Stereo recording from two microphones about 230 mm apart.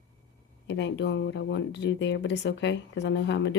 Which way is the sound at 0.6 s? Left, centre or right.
Left.